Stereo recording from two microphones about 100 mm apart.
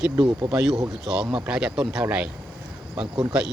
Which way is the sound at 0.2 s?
45° right (ahead or behind).